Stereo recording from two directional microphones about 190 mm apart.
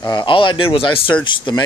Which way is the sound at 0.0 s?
25° left (ahead or behind).